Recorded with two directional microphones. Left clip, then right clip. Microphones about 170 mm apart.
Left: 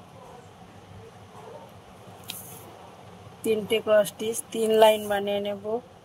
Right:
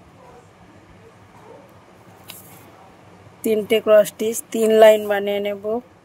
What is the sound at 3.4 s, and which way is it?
A woman's voice, 65° right (ahead or behind).